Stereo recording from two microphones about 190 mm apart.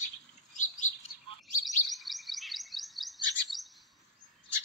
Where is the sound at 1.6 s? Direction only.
Centre (ahead or behind).